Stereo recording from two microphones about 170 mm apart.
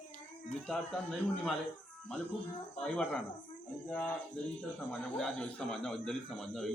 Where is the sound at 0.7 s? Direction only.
Centre (ahead or behind).